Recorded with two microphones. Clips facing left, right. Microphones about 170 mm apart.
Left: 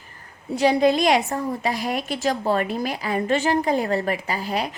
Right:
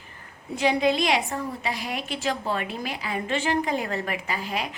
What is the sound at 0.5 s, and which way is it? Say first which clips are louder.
A woman's voice: left 4 dB; 40° left (ahead or behind).